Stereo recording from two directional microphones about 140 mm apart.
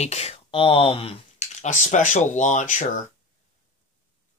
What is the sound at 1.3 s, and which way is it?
Speech, 60° left (ahead or behind).